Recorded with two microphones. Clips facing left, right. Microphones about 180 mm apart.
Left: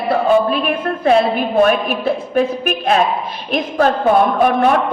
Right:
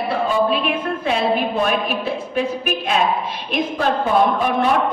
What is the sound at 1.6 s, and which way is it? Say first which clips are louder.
Speech: left 5 dB; 50° left (ahead or behind).